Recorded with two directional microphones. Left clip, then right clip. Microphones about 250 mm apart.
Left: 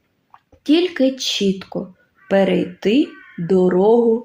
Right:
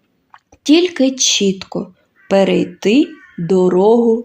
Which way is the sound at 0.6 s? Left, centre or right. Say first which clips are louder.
Right 4 dB; centre.